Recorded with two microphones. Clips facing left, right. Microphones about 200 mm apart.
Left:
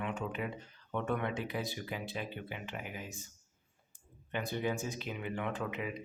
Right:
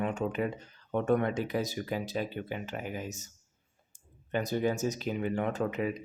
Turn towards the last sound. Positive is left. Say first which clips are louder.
# right 7 dB
turn(degrees=-40)  # may be behind; listen again after turning